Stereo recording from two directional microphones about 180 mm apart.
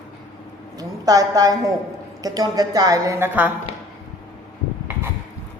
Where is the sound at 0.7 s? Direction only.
20° right (ahead or behind).